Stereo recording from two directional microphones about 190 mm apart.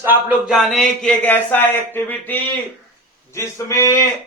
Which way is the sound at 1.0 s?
10° left (ahead or behind).